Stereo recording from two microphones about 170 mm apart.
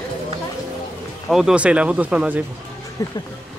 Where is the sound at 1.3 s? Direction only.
5° right (ahead or behind).